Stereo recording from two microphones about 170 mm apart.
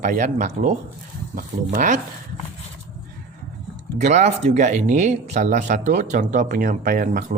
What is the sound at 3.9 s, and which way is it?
Speech, 45° right (ahead or behind).